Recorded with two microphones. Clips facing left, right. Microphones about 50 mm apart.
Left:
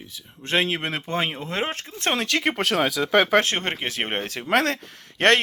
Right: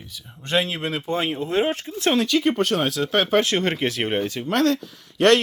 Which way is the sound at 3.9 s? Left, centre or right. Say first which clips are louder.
Right 3 dB; left.